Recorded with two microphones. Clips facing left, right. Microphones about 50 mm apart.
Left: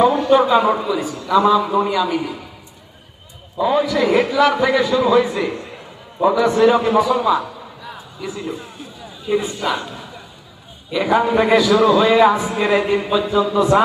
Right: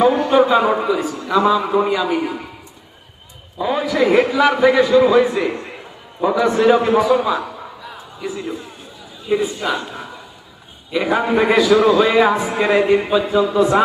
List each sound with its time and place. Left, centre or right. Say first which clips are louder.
0.3 s a man's voice: even; centre
0.6 s a man's voice: right 1 dB; right
3.6 s a man's voice: left 2 dB; centre
4.0 s a man's voice: right 3 dB; right; by 9.7 s centre
10.9 s a man's voice: left 1 dB; centre
12.6 s a man's voice: right 3 dB; right; by 13.8 s centre